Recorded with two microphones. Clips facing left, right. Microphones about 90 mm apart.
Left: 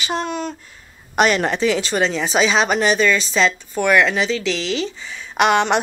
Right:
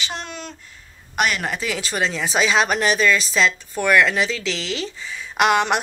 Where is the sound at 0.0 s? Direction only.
45° left (ahead or behind).